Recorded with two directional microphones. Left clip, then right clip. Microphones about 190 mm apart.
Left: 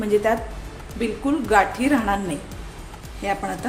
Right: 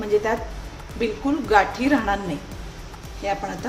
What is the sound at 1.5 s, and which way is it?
Speech, 15° left (ahead or behind).